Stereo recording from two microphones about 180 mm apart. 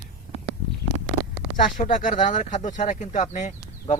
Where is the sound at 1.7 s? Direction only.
45° left (ahead or behind).